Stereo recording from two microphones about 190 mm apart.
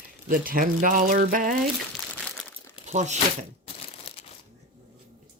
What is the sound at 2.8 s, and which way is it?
Speech, 40° right (ahead or behind).